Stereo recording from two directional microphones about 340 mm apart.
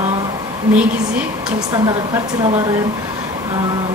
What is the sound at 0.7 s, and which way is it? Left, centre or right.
Speech, centre.